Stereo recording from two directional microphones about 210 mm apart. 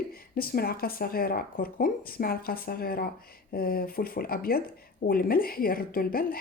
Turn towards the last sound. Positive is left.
turn(degrees=45)  # may be behind; listen again after turning